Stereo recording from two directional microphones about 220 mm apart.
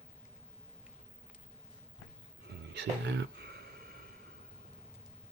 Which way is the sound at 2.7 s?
55° right (ahead or behind).